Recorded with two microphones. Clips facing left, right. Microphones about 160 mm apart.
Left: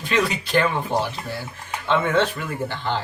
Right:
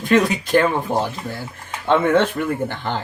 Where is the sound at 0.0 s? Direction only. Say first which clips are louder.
Right 6 dB; 50° right (ahead or behind).